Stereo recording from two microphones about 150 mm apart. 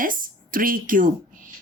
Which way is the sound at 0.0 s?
65° right (ahead or behind).